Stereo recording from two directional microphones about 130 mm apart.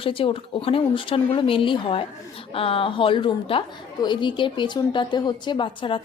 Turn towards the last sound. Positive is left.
turn(degrees=40)  # may be behind; listen again after turning